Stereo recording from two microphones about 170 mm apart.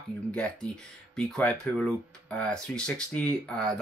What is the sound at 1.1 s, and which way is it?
Speech, 5° left (ahead or behind).